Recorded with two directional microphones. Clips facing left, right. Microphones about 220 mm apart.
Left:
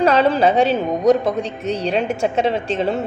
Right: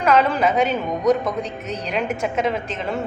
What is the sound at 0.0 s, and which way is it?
A woman's voice, 30° left (ahead or behind).